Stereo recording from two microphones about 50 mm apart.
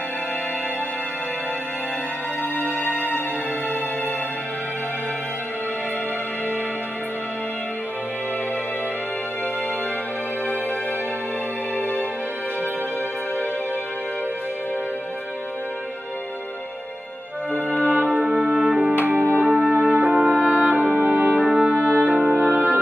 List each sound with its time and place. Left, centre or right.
17.8 s music: right
20.3 s brass instrument: left
20.6 s music: right
21.7 s music: right